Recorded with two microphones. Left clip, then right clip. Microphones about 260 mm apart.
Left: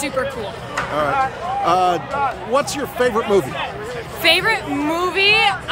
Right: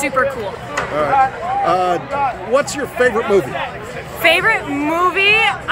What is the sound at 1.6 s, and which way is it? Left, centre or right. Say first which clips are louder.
Speech: even; centre.